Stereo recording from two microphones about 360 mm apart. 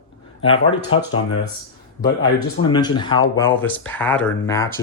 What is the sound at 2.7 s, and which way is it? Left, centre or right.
Speech, centre.